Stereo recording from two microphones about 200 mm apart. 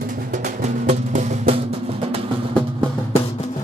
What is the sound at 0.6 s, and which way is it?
Music, 35° right (ahead or behind).